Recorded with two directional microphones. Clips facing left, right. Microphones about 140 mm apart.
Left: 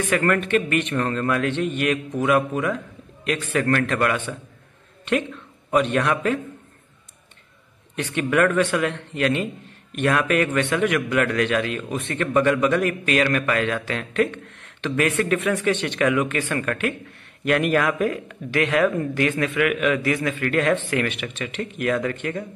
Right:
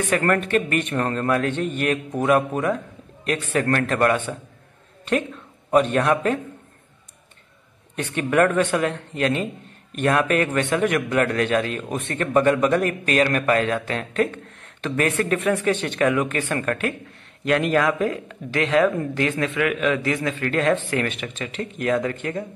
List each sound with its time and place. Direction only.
0.1 s a man's voice: 35° right (ahead or behind)
5.7 s a man's voice: 40° right (ahead or behind)
7.9 s a man's voice: 40° right (ahead or behind)